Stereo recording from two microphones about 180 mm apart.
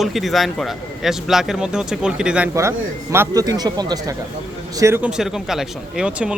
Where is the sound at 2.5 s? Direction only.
15° right (ahead or behind).